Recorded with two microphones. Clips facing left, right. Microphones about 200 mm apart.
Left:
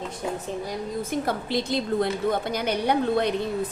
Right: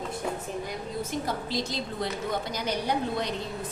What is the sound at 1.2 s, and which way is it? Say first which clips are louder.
A woman's voice: left 4 dB; 60° left (ahead or behind).